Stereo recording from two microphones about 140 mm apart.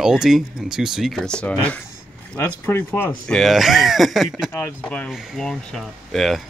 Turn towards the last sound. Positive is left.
turn(degrees=0)  # may be behind; listen again after turning